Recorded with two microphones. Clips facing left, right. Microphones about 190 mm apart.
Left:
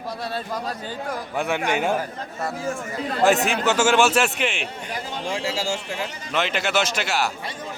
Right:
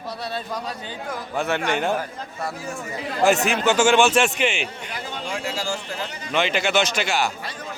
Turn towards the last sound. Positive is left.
turn(degrees=5)  # may be behind; listen again after turning